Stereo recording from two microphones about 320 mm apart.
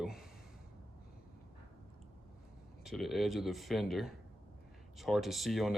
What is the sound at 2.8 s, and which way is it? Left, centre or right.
A man's voice, centre.